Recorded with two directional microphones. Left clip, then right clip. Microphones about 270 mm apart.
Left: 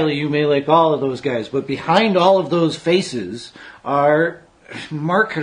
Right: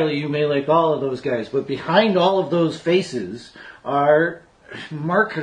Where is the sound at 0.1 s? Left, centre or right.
Left.